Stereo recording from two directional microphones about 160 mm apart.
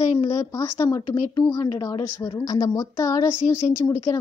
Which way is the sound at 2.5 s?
20° left (ahead or behind).